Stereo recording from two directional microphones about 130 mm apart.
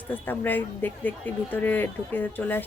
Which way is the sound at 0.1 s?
15° left (ahead or behind).